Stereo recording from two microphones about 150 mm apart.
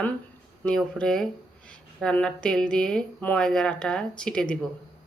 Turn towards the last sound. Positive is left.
turn(degrees=5)  # may be behind; listen again after turning